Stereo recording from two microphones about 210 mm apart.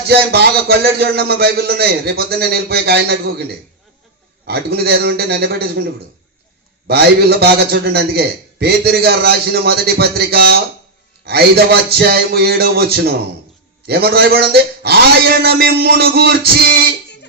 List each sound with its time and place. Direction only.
0.1 s a man's voice: 50° right (ahead or behind)
4.4 s a man's voice: 50° right (ahead or behind)
6.8 s a man's voice: 50° right (ahead or behind)